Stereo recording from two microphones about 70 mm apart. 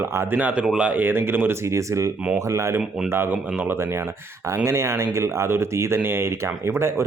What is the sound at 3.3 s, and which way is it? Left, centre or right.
Speech, right.